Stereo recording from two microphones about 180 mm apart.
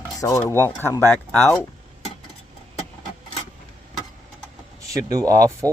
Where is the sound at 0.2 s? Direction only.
15° left (ahead or behind).